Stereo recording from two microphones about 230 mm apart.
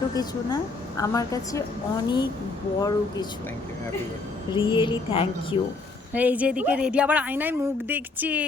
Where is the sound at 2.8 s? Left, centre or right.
Centre.